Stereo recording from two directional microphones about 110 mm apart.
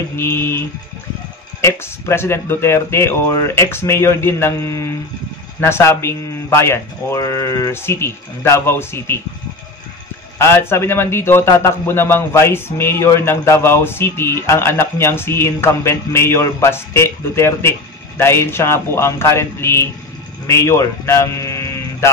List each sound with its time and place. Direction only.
0.1 s a man's voice: 20° left (ahead or behind)
5.6 s a man's voice: 25° left (ahead or behind)
10.4 s a man's voice: 25° left (ahead or behind)